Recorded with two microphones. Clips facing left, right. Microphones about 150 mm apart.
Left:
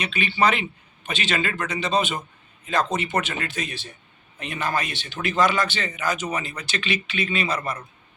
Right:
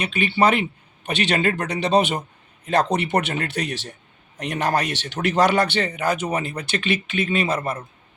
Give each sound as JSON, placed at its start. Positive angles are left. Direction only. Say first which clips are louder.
{"t": 0.0, "sound": "a man's voice", "louder": "right 3 dB", "side_deg": -50}